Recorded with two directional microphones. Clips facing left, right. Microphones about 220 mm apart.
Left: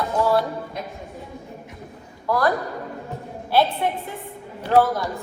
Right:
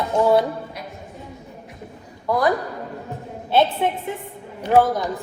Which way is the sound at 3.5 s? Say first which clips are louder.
Right 2 dB; 20° right (ahead or behind).